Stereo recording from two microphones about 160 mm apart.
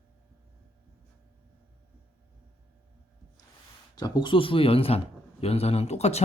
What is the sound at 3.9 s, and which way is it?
Speech, 25° left (ahead or behind).